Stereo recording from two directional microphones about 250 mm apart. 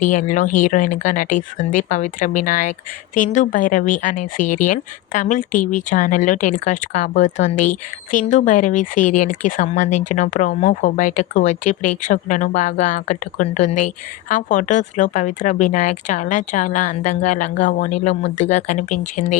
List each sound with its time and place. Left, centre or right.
0.0 s speech: left